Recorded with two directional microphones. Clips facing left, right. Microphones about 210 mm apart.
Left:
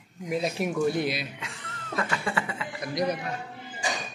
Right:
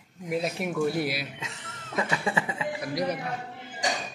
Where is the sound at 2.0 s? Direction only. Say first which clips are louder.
Right 2 dB; 20° right (ahead or behind).